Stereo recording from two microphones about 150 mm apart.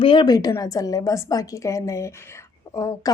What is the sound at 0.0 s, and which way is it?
A woman's voice, 35° left (ahead or behind).